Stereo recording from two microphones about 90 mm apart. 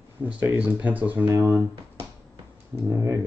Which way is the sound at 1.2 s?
30° right (ahead or behind).